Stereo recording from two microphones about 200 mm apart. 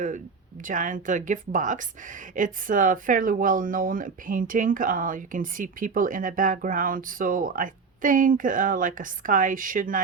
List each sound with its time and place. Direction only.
0.6 s speech: 40° right (ahead or behind)